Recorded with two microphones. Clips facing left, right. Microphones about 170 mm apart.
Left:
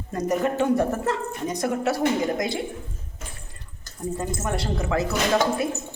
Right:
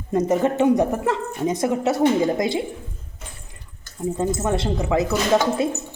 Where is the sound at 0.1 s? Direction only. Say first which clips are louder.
Right 5 dB; 20° right (ahead or behind).